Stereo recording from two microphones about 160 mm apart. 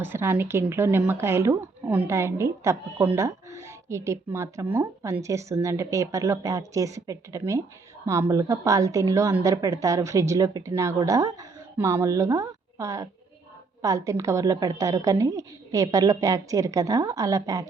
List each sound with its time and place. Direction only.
0.0 s a woman's voice: 15° right (ahead or behind)